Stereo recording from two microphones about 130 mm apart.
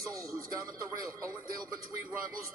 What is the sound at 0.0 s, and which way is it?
A man's voice, 25° right (ahead or behind).